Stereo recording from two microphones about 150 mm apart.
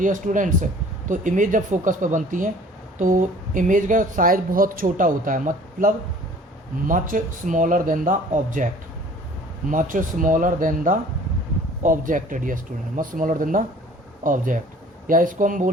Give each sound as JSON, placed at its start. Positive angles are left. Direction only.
{"t": 0.0, "sound": "speech", "side_deg": -60}